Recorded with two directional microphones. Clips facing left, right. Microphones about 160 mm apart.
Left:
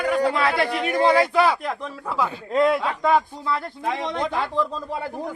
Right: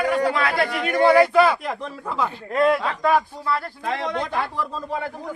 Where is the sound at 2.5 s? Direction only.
20° left (ahead or behind).